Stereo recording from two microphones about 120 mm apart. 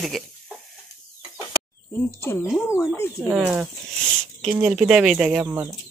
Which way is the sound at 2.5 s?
20° left (ahead or behind).